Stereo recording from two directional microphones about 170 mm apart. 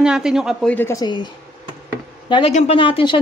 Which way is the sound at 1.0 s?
25° left (ahead or behind).